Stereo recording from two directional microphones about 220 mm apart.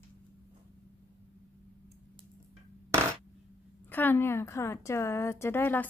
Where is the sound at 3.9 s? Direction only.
10° left (ahead or behind).